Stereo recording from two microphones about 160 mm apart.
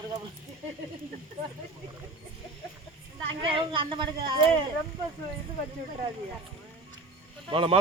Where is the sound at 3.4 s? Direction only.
35° right (ahead or behind).